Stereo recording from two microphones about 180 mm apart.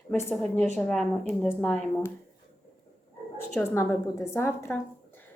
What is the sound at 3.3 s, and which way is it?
A woman's voice, 10° left (ahead or behind).